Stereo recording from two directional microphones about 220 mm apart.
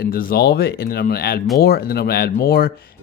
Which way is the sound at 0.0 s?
40° left (ahead or behind).